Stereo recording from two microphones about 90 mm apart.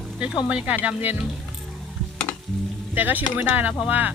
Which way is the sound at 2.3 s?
30° left (ahead or behind).